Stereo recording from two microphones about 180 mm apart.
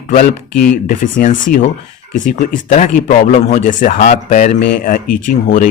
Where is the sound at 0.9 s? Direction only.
50° left (ahead or behind).